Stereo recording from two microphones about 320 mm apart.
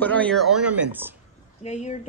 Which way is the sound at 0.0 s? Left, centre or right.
Centre.